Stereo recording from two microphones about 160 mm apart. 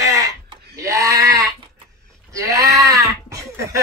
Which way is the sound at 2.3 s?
20° right (ahead or behind).